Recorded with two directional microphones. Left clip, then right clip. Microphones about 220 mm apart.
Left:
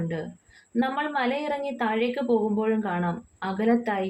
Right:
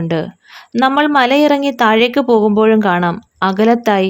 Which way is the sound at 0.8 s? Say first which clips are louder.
Right 15 dB; 50° right (ahead or behind).